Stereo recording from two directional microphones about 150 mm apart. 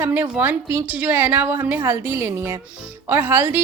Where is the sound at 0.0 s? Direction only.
15° right (ahead or behind).